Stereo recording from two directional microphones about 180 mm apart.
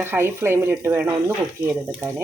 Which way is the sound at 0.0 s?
10° right (ahead or behind).